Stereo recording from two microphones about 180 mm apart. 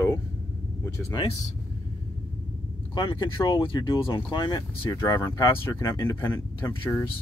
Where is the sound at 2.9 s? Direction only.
25° left (ahead or behind).